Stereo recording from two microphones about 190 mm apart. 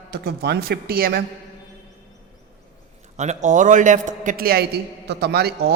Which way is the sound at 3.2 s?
40° right (ahead or behind).